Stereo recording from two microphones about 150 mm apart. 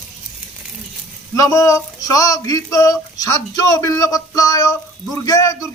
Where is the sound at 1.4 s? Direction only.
20° left (ahead or behind).